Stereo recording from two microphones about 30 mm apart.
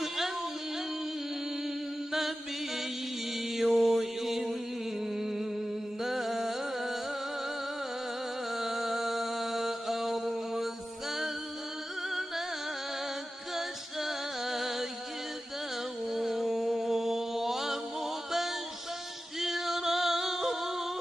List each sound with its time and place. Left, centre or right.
2.1 s music: centre
3.3 s mantra: centre
5.0 s a sound: centre
6.0 s music: centre
8.5 s music: centre
13.6 s music: centre
16.1 s mantra: centre
19.4 s music: centre